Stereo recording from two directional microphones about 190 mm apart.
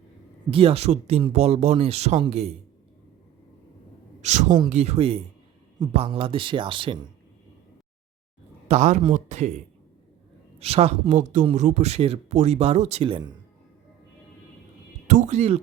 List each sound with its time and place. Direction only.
0.5 s speech: 30° right (ahead or behind)
4.2 s speech: 35° right (ahead or behind)
8.6 s speech: 35° right (ahead or behind)
10.6 s speech: 35° right (ahead or behind)
15.0 s a sound: 40° right (ahead or behind)